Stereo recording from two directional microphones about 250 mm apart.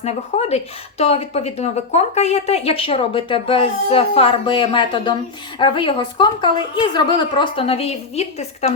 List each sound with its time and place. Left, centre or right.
0.0 s speech: left